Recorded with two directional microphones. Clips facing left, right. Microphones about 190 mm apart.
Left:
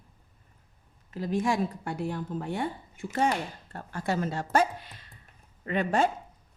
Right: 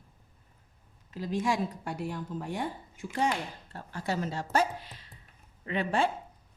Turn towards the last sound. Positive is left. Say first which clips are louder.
# left 3 dB
turn(degrees=45)  # may be behind; listen again after turning